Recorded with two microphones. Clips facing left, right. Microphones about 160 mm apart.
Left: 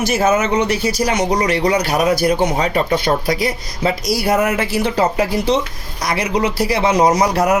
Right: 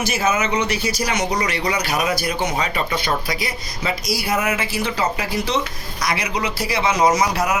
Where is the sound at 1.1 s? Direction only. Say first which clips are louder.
Left 5 dB; 35° left (ahead or behind).